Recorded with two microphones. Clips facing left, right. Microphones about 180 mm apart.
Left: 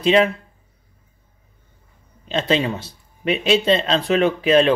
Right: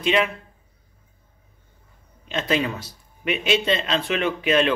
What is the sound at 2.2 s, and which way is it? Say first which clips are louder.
Speech: left 4 dB; 30° left (ahead or behind).